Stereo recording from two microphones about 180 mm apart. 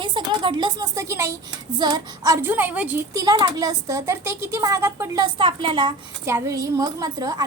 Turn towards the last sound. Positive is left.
turn(degrees=-20)  # may be behind; listen again after turning